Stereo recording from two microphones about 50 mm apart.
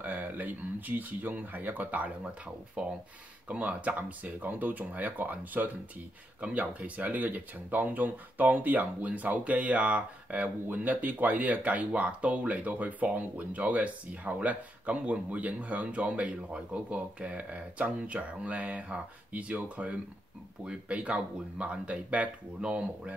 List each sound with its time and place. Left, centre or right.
0.0 s speech: right